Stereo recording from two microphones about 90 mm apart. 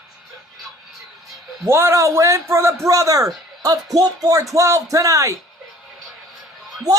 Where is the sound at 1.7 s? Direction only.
25° right (ahead or behind).